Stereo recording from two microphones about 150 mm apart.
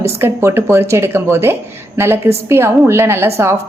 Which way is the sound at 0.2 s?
15° right (ahead or behind).